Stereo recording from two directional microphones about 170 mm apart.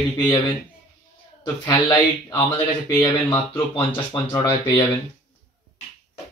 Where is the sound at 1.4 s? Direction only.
25° left (ahead or behind).